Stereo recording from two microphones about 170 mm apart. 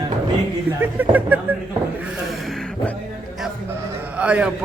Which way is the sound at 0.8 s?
10° right (ahead or behind).